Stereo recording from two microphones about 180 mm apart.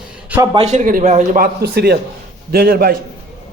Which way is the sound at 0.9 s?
45° right (ahead or behind).